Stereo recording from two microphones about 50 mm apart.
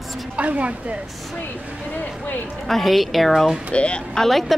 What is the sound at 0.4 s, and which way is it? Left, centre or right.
Speech, right.